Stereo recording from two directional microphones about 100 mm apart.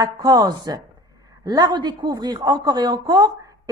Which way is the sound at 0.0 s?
40° right (ahead or behind).